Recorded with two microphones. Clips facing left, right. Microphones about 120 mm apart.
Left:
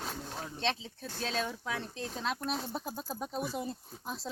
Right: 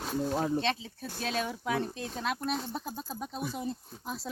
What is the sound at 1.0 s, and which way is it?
Speech, 10° right (ahead or behind).